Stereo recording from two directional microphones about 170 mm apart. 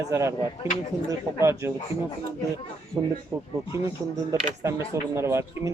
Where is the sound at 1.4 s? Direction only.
15° right (ahead or behind).